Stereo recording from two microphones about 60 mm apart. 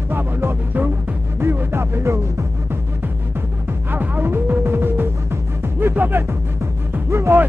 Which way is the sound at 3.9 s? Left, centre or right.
Right.